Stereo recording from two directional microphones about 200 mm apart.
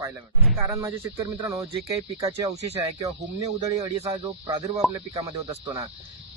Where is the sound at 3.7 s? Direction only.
15° right (ahead or behind).